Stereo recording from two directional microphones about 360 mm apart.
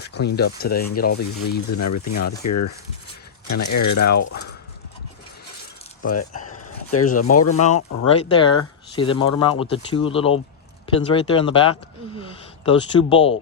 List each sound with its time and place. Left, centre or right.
0.1 s speech: left
1.7 s speech: left
6.4 s a sound: left
7.5 s speech: centre